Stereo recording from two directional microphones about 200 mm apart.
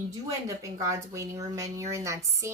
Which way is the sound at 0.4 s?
15° right (ahead or behind).